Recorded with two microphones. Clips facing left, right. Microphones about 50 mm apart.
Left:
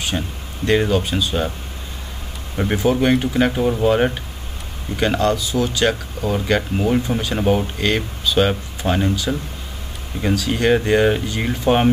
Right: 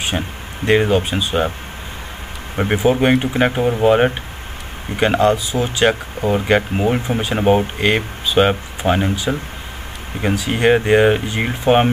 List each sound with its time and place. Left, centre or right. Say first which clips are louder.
0.1 s speech: right 2 dB; right
2.5 s speech: right 2 dB; right